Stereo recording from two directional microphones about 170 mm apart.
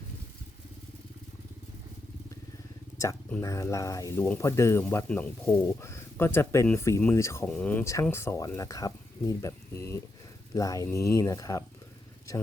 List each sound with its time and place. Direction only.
3.4 s speech: 20° left (ahead or behind)
7.4 s speech: 5° left (ahead or behind)